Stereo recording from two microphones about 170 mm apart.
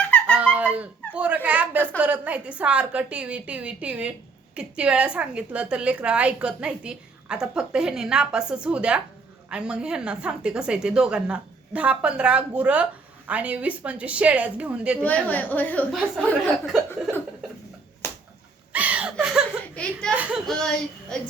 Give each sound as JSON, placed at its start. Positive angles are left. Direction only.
{"t": 0.3, "sound": "a sound", "side_deg": -10}
{"t": 1.1, "sound": "a woman's voice", "side_deg": -10}
{"t": 15.0, "sound": "a woman's voice", "side_deg": 10}
{"t": 18.0, "sound": "finger snapping", "side_deg": 15}
{"t": 18.7, "sound": "a sound", "side_deg": -10}
{"t": 19.1, "sound": "laughter", "side_deg": -5}
{"t": 19.7, "sound": "a woman's voice", "side_deg": 5}
{"t": 20.1, "sound": "a woman's voice", "side_deg": -5}
{"t": 20.5, "sound": "a woman's voice", "side_deg": 5}